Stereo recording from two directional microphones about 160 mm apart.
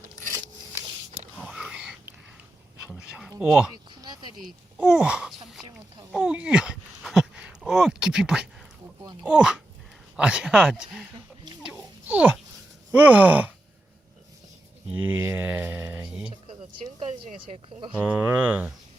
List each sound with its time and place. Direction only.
1.5 s whispering: 5° right (ahead or behind)
2.8 s a sound: 5° right (ahead or behind)
3.3 s speech: 5° right (ahead or behind)
4.0 s a sound: 25° right (ahead or behind)
4.8 s speech: 5° right (ahead or behind)
6.1 s dog: 5° right (ahead or behind)
9.2 s speech: 5° right (ahead or behind)
11.7 s wild animals: 10° right (ahead or behind)
12.9 s speech: 10° right (ahead or behind)
14.8 s a sound: 10° right (ahead or behind)
17.0 s a sound: 40° right (ahead or behind)
17.9 s speech: 10° right (ahead or behind)